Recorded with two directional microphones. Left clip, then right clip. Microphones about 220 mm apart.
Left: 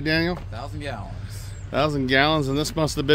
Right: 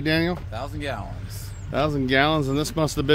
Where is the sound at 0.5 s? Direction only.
40° right (ahead or behind).